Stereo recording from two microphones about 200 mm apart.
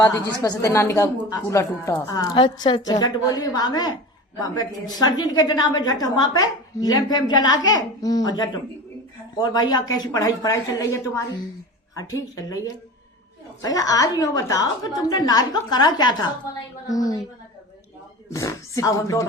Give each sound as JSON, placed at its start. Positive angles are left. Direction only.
{"t": 0.0, "sound": "a woman's voice", "side_deg": 20}
{"t": 18.3, "sound": "a woman's voice", "side_deg": 15}